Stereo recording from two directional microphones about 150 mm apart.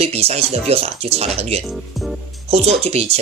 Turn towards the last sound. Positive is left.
turn(degrees=-45)  # may be behind; listen again after turning